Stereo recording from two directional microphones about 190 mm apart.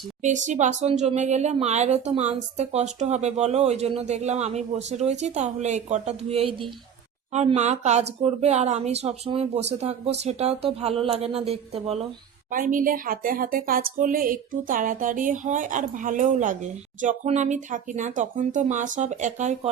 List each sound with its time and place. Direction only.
0.2 s speech: 40° right (ahead or behind)
12.5 s speech: 45° right (ahead or behind)